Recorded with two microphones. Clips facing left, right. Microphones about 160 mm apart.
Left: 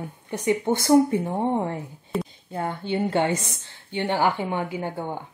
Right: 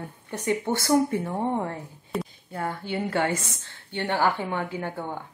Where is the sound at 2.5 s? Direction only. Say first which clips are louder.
Left 3 dB; 20° left (ahead or behind).